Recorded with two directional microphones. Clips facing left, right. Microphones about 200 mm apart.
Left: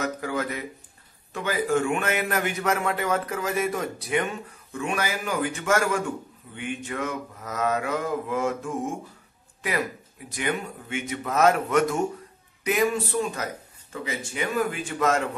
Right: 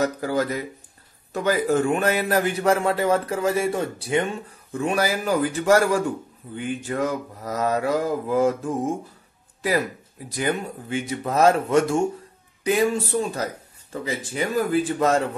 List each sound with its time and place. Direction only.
0.0 s a man's voice: 35° right (ahead or behind)